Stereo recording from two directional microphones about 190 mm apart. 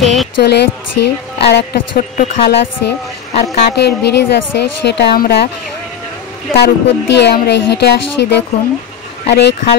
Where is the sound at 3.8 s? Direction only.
65° left (ahead or behind).